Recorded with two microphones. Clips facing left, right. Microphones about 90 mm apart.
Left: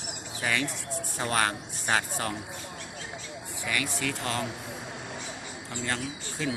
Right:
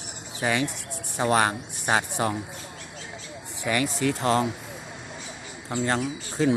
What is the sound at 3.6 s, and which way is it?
Speech, 30° right (ahead or behind).